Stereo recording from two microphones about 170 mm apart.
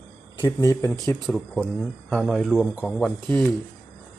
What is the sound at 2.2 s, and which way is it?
Speech, centre (ahead or behind).